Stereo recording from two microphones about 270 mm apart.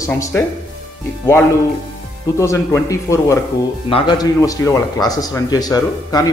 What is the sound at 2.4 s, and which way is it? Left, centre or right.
A man's voice, centre.